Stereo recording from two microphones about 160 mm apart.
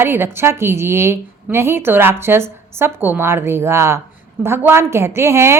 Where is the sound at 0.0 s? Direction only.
15° right (ahead or behind).